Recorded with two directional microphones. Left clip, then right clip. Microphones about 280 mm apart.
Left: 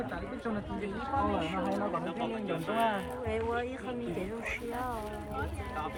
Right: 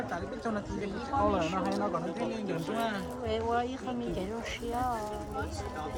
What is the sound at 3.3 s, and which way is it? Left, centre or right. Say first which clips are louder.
Speech: right 3 dB; right.